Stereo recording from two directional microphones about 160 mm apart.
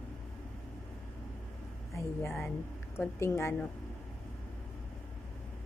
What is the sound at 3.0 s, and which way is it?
Speech, 15° left (ahead or behind).